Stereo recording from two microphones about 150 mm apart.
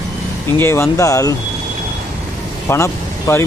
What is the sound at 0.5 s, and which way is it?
Speech, 15° left (ahead or behind).